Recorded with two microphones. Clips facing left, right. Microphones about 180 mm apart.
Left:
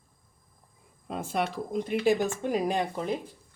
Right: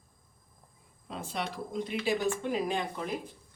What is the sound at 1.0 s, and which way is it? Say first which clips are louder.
Speech: left 6 dB; 50° left (ahead or behind).